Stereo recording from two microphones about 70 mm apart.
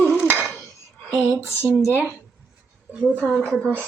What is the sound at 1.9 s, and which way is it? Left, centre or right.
Speech, right.